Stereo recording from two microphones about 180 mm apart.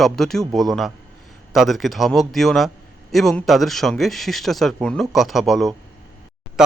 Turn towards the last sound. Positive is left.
turn(degrees=-5)  # may be behind; listen again after turning